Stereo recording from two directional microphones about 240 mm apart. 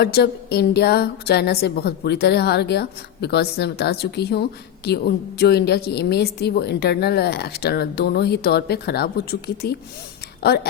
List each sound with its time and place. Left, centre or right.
0.0 s a woman's voice: left